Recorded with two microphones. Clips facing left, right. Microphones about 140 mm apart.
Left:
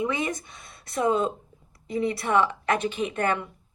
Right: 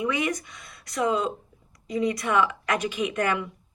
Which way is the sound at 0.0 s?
25° left (ahead or behind).